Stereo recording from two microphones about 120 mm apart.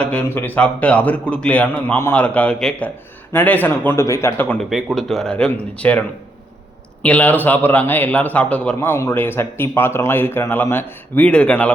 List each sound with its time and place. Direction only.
0.0 s a man's voice: 10° left (ahead or behind)
4.7 s speech: centre (ahead or behind)
7.0 s a man's voice: 10° left (ahead or behind)